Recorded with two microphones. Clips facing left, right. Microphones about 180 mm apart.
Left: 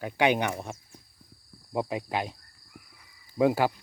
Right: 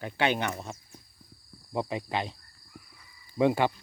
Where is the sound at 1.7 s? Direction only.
5° left (ahead or behind).